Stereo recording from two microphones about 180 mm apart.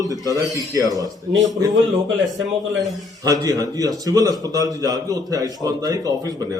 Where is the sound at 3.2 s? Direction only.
20° right (ahead or behind).